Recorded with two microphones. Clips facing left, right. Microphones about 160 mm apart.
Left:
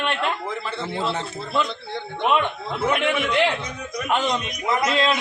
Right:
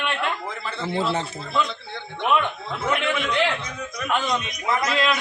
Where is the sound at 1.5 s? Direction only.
25° left (ahead or behind).